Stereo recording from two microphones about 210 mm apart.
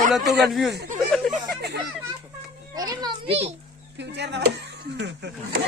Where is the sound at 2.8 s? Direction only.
15° right (ahead or behind).